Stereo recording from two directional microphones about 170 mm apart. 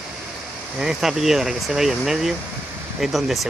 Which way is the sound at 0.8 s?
5° right (ahead or behind).